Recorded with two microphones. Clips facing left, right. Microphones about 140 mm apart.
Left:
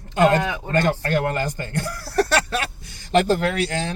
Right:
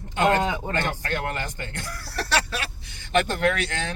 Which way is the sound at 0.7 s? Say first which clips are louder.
Left 7 dB; 35° left (ahead or behind).